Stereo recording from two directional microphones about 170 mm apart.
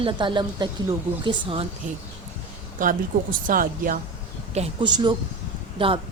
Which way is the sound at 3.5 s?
55° right (ahead or behind).